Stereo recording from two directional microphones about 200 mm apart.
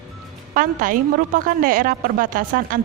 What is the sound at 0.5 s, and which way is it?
Speech, 45° right (ahead or behind).